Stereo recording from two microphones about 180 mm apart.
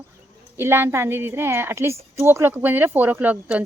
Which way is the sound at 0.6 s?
15° right (ahead or behind).